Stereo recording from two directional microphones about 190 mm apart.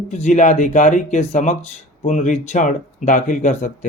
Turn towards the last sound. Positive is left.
turn(degrees=40)  # may be behind; listen again after turning